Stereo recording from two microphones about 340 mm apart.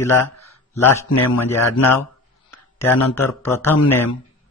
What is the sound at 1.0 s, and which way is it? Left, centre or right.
Speech, left.